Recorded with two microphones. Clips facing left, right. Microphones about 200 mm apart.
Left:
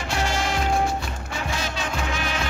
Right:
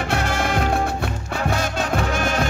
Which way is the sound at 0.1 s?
55° right (ahead or behind).